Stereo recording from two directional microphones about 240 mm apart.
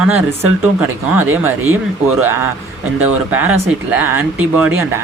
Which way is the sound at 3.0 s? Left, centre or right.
Centre.